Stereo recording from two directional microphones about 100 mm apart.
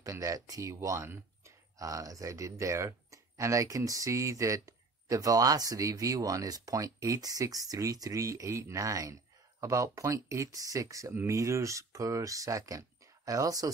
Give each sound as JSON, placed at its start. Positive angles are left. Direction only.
{"t": 0.0, "sound": "speech", "side_deg": -30}